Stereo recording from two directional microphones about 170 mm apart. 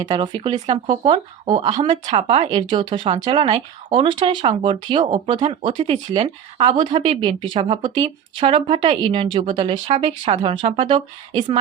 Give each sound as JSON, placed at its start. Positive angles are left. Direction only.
{"t": 0.1, "sound": "speech", "side_deg": -30}
{"t": 2.0, "sound": "speech", "side_deg": -40}
{"t": 2.6, "sound": "speech", "side_deg": -30}